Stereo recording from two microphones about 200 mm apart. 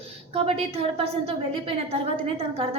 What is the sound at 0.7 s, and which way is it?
A woman's voice, 30° right (ahead or behind).